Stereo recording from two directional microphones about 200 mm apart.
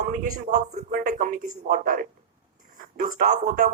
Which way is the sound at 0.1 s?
45° right (ahead or behind).